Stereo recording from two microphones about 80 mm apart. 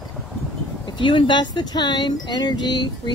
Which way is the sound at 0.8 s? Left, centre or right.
Left.